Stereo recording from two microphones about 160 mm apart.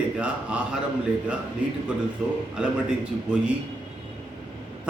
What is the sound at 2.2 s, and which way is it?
Speech, 5° right (ahead or behind).